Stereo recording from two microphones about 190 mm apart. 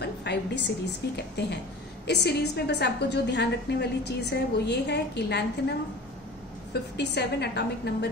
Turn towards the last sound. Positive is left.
turn(degrees=60)  # may be behind; listen again after turning